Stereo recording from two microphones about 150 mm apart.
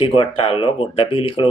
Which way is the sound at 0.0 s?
40° left (ahead or behind).